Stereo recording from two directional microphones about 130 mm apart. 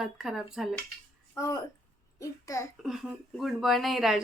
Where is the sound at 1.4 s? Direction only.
20° left (ahead or behind).